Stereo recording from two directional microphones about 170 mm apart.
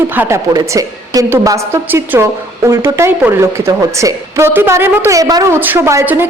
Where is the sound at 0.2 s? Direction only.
15° right (ahead or behind).